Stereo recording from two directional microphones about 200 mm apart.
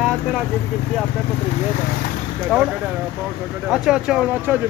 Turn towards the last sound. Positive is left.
turn(degrees=-10)  # may be behind; listen again after turning